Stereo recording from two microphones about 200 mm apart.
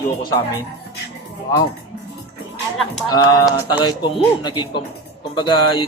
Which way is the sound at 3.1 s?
20° left (ahead or behind).